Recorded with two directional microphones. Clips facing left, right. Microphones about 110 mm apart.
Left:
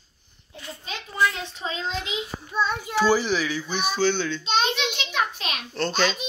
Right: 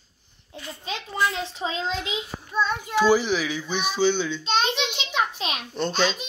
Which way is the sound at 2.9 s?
15° right (ahead or behind).